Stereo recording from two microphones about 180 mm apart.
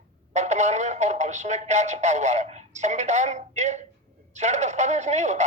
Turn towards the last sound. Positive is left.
turn(degrees=-40)  # may be behind; listen again after turning